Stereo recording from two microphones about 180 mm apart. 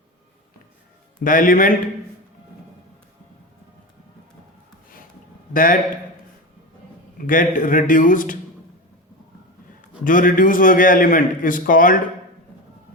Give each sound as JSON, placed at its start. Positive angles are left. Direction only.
{"t": 1.2, "sound": "a man's voice", "side_deg": 50}
{"t": 5.5, "sound": "a man's voice", "side_deg": 50}
{"t": 7.3, "sound": "a man's voice", "side_deg": 50}
{"t": 10.0, "sound": "a man's voice", "side_deg": 50}